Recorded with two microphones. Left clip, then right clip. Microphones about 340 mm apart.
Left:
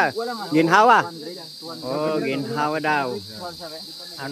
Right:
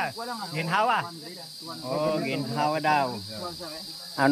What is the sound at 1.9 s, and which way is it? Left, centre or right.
Cricket, centre.